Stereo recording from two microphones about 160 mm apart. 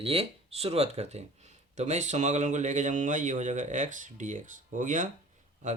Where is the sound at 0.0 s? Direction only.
40° right (ahead or behind).